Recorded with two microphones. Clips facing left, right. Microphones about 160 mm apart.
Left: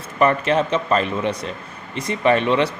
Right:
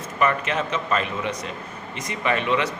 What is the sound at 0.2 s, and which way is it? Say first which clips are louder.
A man's voice: left 6 dB; 35° left (ahead or behind).